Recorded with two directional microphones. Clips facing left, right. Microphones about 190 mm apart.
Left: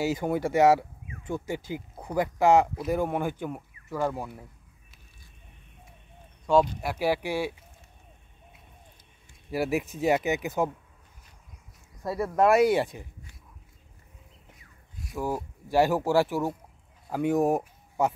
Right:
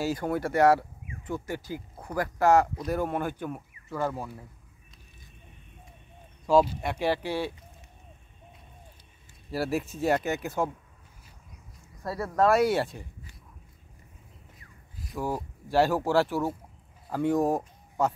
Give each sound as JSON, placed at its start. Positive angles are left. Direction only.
{"t": 0.0, "sound": "speech", "side_deg": 15}
{"t": 6.4, "sound": "speech", "side_deg": -5}
{"t": 9.5, "sound": "speech", "side_deg": 15}
{"t": 12.0, "sound": "speech", "side_deg": 15}
{"t": 14.6, "sound": "a sound", "side_deg": 0}
{"t": 15.2, "sound": "speech", "side_deg": 10}